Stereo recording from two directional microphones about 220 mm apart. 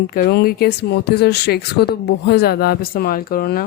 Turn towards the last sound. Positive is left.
turn(degrees=40)  # may be behind; listen again after turning